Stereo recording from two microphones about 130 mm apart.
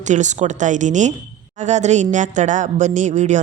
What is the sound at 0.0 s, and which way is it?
A woman's voice, 65° right (ahead or behind).